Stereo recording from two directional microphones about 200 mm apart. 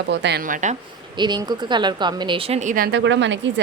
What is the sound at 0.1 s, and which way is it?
Speech, 60° right (ahead or behind).